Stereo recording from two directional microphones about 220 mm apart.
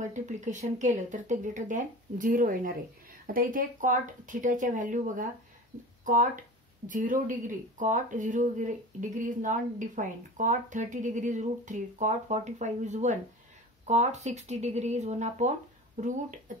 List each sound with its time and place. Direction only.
0.0 s speech: 35° right (ahead or behind)